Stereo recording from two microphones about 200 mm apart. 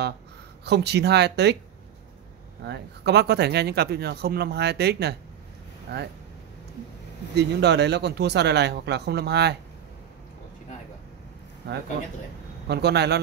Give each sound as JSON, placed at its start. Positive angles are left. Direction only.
{"t": 0.7, "sound": "speech", "side_deg": -55}
{"t": 2.6, "sound": "speech", "side_deg": -55}
{"t": 7.3, "sound": "speech", "side_deg": -60}
{"t": 11.6, "sound": "speech", "side_deg": -55}